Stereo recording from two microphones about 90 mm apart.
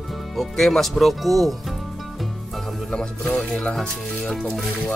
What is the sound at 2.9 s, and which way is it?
Speech, 15° left (ahead or behind).